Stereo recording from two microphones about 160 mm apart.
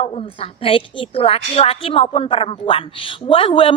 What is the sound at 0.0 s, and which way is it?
A woman's voice, 35° left (ahead or behind).